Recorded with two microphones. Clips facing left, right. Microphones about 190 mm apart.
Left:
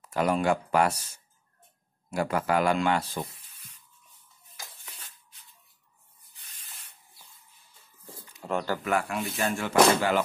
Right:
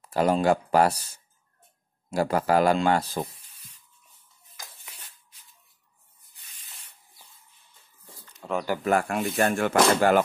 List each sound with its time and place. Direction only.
0.0 s speech: 30° right (ahead or behind)
2.0 s speech: 35° right (ahead or behind)
8.4 s bird: centre (ahead or behind)
8.8 s speech: 45° right (ahead or behind)